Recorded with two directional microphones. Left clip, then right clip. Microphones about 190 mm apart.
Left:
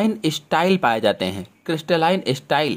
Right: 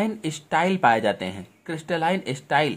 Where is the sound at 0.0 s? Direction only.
25° left (ahead or behind).